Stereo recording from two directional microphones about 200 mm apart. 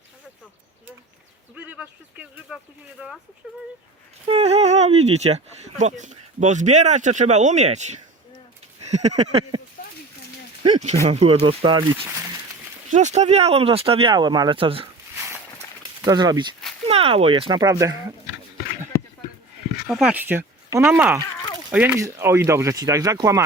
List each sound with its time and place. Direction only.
1.5 s speech: 10° right (ahead or behind)
4.3 s speech: 30° right (ahead or behind)
8.8 s a sound: 35° right (ahead or behind)
10.6 s a sound: 25° right (ahead or behind)
11.0 s speech: 30° right (ahead or behind)
12.9 s speech: 35° right (ahead or behind)
16.0 s speech: 20° right (ahead or behind)
19.9 s speech: 5° right (ahead or behind)